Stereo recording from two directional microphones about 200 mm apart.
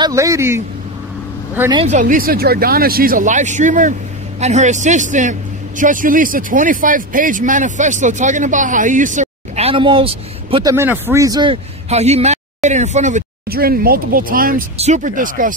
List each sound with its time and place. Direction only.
0.0 s a man's voice: 15° right (ahead or behind)
1.9 s a man's voice: 40° right (ahead or behind)